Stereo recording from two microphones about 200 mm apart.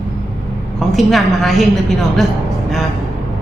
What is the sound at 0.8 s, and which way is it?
Speech, centre (ahead or behind).